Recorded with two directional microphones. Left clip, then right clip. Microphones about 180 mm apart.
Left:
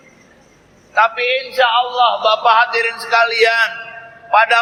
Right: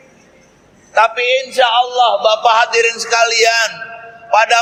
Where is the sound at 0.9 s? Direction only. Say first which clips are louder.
Right 2 dB; 55° right (ahead or behind).